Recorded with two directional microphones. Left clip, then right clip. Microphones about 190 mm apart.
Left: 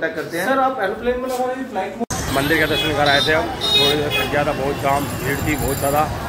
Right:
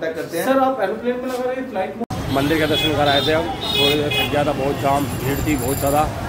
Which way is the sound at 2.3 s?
15° right (ahead or behind).